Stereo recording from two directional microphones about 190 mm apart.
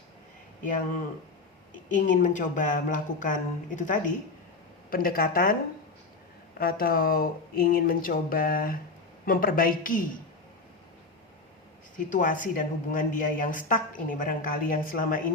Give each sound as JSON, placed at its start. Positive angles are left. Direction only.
{"t": 1.9, "sound": "speech", "side_deg": 45}
{"t": 6.6, "sound": "speech", "side_deg": 50}
{"t": 11.9, "sound": "speech", "side_deg": 45}